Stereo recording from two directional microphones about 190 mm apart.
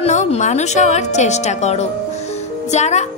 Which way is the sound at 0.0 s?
35° left (ahead or behind).